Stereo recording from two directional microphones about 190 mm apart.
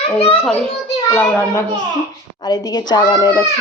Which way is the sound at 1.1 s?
5° left (ahead or behind).